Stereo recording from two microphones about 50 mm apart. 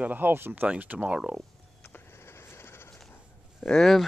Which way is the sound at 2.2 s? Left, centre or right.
Left.